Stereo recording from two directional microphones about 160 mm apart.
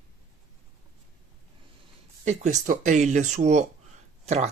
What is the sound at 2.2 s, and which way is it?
Speech, 50° right (ahead or behind).